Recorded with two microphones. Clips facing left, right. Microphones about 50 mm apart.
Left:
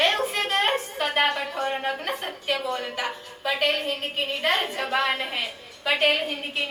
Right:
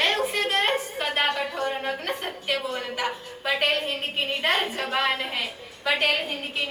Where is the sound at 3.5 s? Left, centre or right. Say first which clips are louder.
Even; centre.